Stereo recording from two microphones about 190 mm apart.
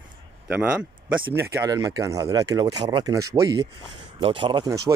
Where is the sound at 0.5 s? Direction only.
5° right (ahead or behind).